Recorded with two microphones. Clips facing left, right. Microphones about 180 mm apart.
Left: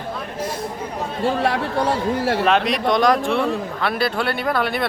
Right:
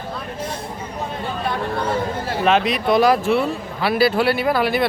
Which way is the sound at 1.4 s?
90° left.